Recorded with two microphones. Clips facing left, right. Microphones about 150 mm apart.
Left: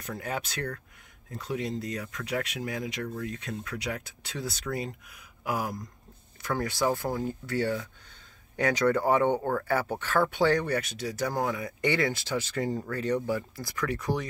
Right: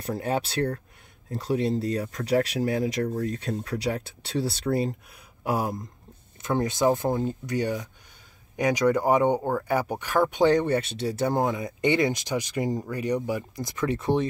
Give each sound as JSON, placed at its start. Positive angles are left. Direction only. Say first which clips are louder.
{"t": 0.0, "sound": "speech", "louder": "right 7 dB", "side_deg": -30}